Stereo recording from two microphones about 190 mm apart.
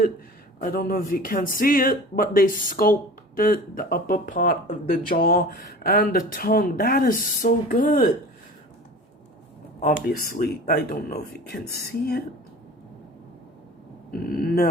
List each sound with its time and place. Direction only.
0.6 s speech: 50° left (ahead or behind)
9.8 s speech: 45° left (ahead or behind)
14.1 s speech: 50° left (ahead or behind)